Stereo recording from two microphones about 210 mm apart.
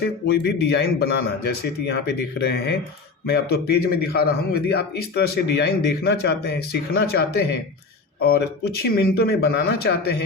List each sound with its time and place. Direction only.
0.0 s a man's voice: 50° left (ahead or behind)